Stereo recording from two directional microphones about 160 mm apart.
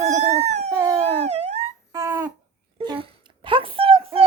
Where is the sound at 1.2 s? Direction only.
45° right (ahead or behind).